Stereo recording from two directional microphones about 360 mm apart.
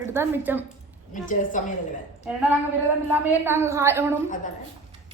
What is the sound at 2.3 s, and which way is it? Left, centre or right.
A woman's voice, centre.